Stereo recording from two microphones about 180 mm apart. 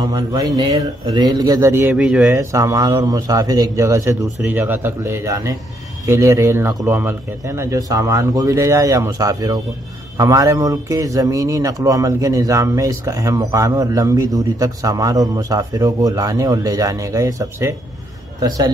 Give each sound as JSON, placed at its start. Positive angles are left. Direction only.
{"t": 0.0, "sound": "a man's voice", "side_deg": -20}